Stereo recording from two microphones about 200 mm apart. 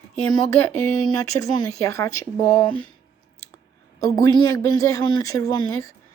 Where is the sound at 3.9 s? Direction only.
15° left (ahead or behind).